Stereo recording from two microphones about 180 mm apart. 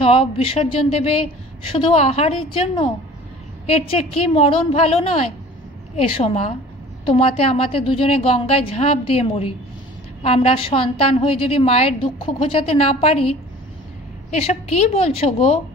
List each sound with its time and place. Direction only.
0.0 s a woman's voice: 30° left (ahead or behind)
14.3 s a woman's voice: 35° left (ahead or behind)